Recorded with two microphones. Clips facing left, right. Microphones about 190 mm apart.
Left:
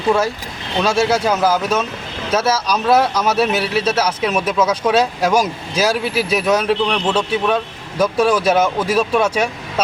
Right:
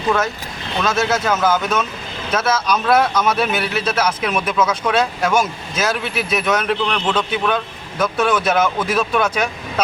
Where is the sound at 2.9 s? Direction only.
30° left (ahead or behind).